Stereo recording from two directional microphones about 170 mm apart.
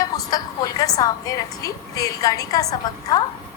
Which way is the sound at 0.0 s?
20° left (ahead or behind).